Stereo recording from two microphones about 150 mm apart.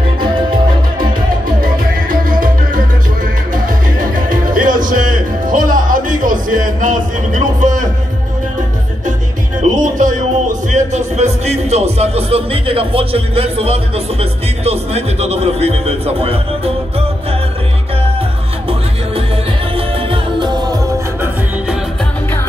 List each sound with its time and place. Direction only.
0.2 s music: 70° right (ahead or behind)
9.6 s music: 55° right (ahead or behind)
14.6 s a sound: 45° right (ahead or behind)
20.1 s music: 30° right (ahead or behind)